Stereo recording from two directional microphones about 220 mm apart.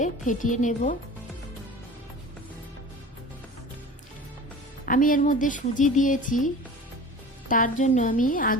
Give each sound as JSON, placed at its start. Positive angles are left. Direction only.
{"t": 0.0, "sound": "speech", "side_deg": 35}
{"t": 4.9, "sound": "speech", "side_deg": 40}